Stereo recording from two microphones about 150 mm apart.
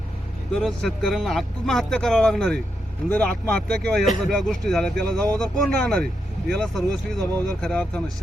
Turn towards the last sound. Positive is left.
turn(degrees=5)  # may be behind; listen again after turning